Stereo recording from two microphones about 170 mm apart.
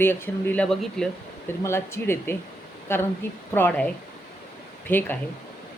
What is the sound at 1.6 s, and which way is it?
Speech, 15° left (ahead or behind).